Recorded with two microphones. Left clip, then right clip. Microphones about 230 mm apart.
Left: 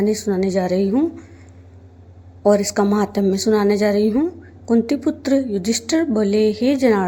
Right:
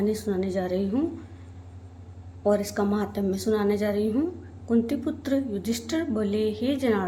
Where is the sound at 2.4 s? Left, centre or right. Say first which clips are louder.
Left 8 dB; left.